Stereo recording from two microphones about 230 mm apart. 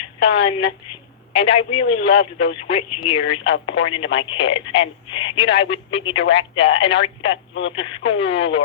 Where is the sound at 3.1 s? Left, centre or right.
Left.